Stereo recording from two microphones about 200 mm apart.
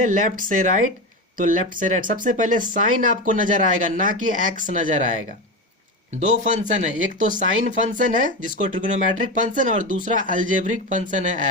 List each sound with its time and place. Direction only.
0.0 s speech: 40° right (ahead or behind)
6.1 s speech: 35° right (ahead or behind)